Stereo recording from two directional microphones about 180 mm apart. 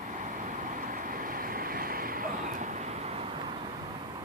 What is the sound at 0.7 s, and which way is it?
Waves, 50° right (ahead or behind).